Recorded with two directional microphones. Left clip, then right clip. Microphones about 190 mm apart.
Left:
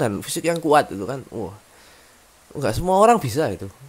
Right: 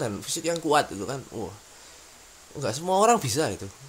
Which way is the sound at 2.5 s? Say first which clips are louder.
Left 6 dB; 45° left (ahead or behind).